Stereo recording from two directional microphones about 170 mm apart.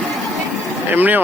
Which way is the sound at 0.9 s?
10° right (ahead or behind).